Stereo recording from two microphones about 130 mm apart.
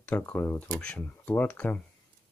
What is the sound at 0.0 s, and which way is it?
Speech, 10° left (ahead or behind).